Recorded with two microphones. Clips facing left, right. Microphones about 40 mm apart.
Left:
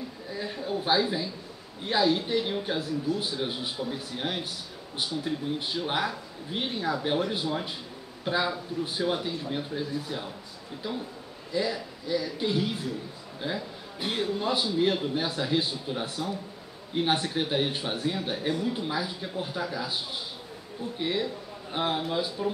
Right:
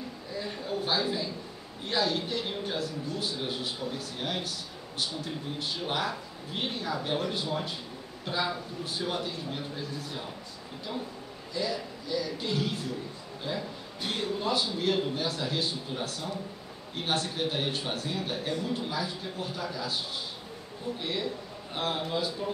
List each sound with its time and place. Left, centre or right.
0.3 s a sound: centre
1.9 s speech: centre
11.5 s speech: centre
21.0 s speech: centre